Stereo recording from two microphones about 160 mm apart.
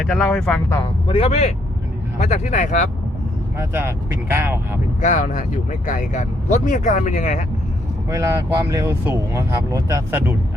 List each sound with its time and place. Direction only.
0.0 s speech: centre (ahead or behind)
1.0 s speech: 35° left (ahead or behind); by 2.9 s 50° left (ahead or behind)
3.6 s speech: 15° right (ahead or behind)
4.9 s speech: 55° left (ahead or behind)
8.1 s speech: 20° right (ahead or behind)